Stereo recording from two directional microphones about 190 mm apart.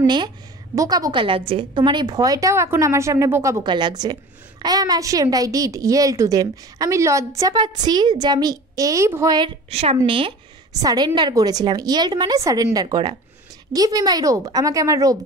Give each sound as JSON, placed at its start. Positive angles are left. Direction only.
{"t": 0.0, "sound": "a woman's voice", "side_deg": -25}
{"t": 9.7, "sound": "a woman's voice", "side_deg": -30}